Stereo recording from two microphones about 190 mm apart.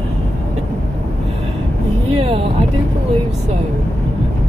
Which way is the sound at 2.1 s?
30° right (ahead or behind).